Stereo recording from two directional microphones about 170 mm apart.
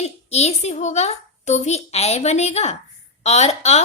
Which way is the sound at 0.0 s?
40° left (ahead or behind).